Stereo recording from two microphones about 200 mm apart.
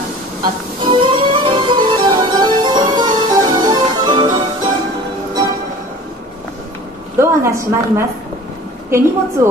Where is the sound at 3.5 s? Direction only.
20° right (ahead or behind).